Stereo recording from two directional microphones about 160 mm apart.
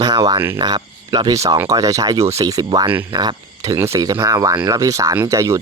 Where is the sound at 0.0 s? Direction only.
25° right (ahead or behind).